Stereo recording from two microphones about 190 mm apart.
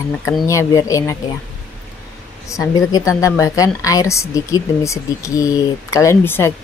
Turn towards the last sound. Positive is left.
turn(degrees=15)  # may be behind; listen again after turning